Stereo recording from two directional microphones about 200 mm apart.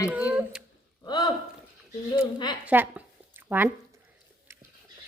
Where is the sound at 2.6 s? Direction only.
10° right (ahead or behind).